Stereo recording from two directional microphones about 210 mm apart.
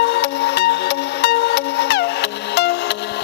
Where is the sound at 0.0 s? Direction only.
50° left (ahead or behind).